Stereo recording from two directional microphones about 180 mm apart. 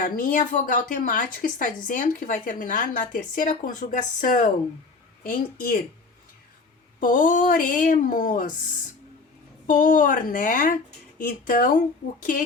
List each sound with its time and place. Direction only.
0.0 s a woman's voice: 50° left (ahead or behind)
7.0 s a woman's voice: 45° left (ahead or behind)
9.6 s a woman's voice: 50° left (ahead or behind)